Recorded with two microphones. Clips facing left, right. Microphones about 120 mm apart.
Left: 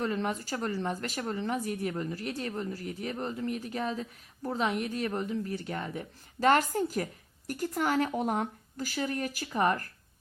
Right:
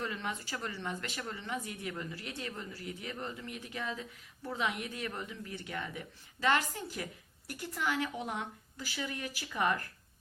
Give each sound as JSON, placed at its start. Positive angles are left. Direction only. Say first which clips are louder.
{"t": 0.0, "sound": "a woman's voice", "louder": "left 7 dB", "side_deg": 35}